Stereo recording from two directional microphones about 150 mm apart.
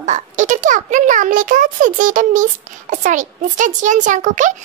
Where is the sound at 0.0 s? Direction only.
55° right (ahead or behind).